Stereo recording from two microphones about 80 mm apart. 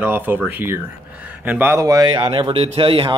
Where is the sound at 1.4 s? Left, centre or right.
Right.